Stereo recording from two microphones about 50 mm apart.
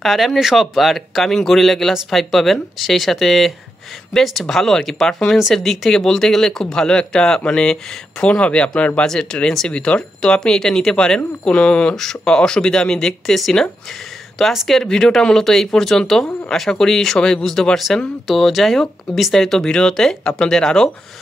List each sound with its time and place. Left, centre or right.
0.0 s speech: centre
14.5 s speech: centre
14.8 s speech: centre